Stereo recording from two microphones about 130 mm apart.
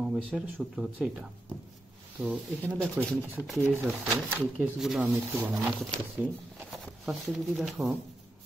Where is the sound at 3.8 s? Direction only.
Centre (ahead or behind).